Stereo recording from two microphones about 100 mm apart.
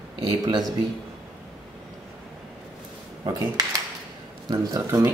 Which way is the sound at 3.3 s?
40° right (ahead or behind).